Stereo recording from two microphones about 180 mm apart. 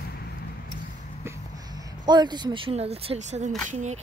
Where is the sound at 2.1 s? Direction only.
25° right (ahead or behind); by 3.9 s 40° right (ahead or behind).